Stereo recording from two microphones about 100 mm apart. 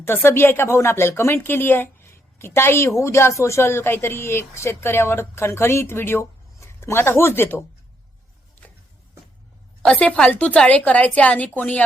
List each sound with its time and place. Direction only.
0.0 s a woman's voice: 25° left (ahead or behind)
9.8 s a woman's voice: 10° left (ahead or behind)